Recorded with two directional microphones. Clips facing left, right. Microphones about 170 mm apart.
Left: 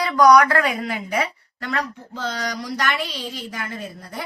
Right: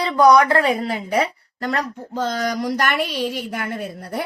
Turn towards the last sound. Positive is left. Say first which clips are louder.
# right 6 dB
turn(degrees=-60)  # may be behind; listen again after turning